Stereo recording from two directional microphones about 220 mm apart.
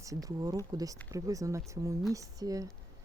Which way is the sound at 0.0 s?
15° right (ahead or behind).